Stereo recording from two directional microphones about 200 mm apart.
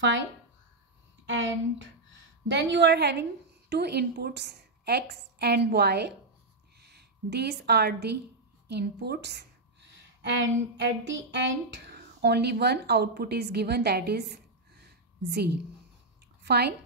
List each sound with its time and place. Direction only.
1.2 s a woman's voice: 70° right (ahead or behind)